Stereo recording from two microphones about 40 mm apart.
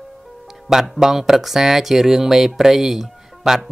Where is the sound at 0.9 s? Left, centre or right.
Centre.